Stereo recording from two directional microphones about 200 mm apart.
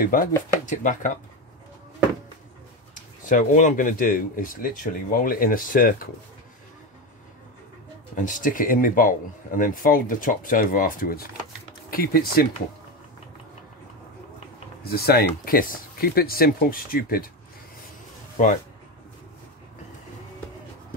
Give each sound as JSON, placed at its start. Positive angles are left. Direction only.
{"t": 0.0, "sound": "speech", "side_deg": 45}
{"t": 2.9, "sound": "speech", "side_deg": 40}
{"t": 8.2, "sound": "speech", "side_deg": 40}
{"t": 14.9, "sound": "speech", "side_deg": 50}
{"t": 18.4, "sound": "speech", "side_deg": 40}